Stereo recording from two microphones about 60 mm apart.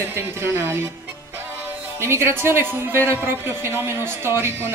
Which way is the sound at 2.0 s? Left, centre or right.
Right.